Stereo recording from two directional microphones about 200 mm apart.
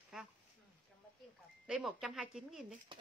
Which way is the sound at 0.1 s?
5° right (ahead or behind).